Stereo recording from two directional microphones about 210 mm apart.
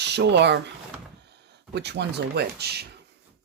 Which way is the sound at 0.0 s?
55° right (ahead or behind).